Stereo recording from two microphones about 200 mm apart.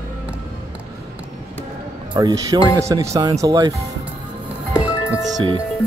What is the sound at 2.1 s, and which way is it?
Speech, 20° right (ahead or behind).